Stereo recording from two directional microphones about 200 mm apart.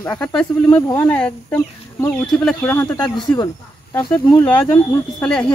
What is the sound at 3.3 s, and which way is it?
Speech, 20° left (ahead or behind).